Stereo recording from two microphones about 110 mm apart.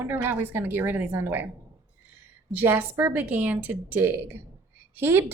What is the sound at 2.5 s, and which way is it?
A woman's voice, 20° right (ahead or behind).